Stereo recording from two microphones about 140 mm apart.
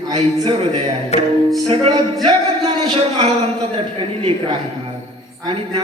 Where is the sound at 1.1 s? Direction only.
50° left (ahead or behind).